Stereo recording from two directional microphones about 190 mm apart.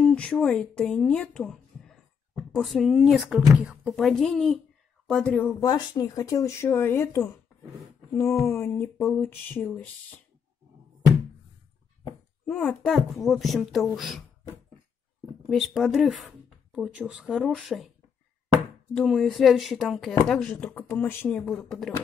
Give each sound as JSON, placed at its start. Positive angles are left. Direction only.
{"t": 0.0, "sound": "speech", "side_deg": 5}
{"t": 5.6, "sound": "speech", "side_deg": 20}
{"t": 8.1, "sound": "a sound", "side_deg": 15}
{"t": 8.5, "sound": "speech", "side_deg": 15}
{"t": 12.4, "sound": "speech", "side_deg": 5}
{"t": 15.5, "sound": "speech", "side_deg": 0}
{"t": 18.9, "sound": "speech", "side_deg": 0}